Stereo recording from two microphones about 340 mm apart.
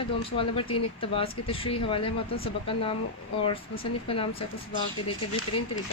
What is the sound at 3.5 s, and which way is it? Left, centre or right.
Speech, centre.